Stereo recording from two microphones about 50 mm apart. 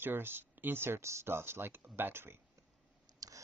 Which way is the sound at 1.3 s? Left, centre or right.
Right.